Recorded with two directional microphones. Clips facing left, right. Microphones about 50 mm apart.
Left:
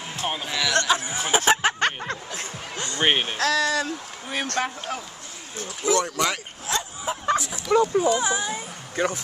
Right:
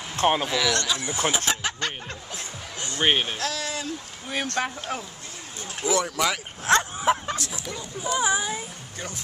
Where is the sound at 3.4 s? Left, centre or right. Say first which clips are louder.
Left 8 dB; left.